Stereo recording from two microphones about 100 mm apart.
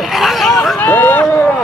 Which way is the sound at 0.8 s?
20° left (ahead or behind).